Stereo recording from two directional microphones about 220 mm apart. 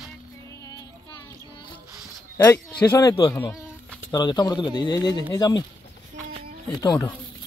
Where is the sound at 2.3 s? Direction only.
15° left (ahead or behind).